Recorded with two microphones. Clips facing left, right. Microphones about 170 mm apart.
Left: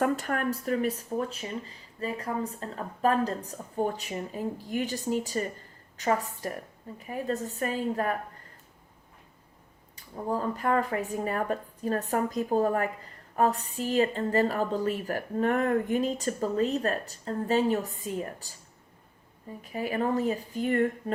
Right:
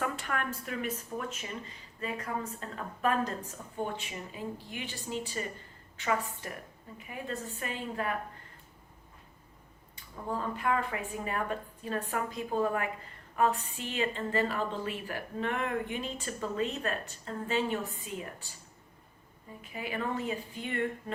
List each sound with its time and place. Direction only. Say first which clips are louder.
0.0 s speech: left 7 dB; 40° left (ahead or behind)
9.9 s speech: left 5 dB; 40° left (ahead or behind)
19.7 s speech: left 7 dB; 40° left (ahead or behind)